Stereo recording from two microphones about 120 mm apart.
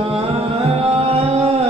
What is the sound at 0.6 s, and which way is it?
Music, 60° right (ahead or behind).